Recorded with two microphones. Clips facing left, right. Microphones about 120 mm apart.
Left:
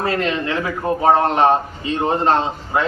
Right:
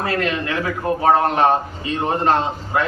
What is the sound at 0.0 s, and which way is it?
A man's voice, 25° left (ahead or behind).